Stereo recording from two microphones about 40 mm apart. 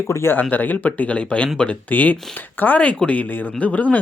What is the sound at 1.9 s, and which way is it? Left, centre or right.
Speech, left.